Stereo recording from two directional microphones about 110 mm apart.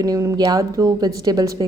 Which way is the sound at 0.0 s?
30° right (ahead or behind).